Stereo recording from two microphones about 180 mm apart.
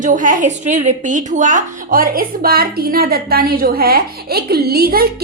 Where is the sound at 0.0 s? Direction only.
45° right (ahead or behind).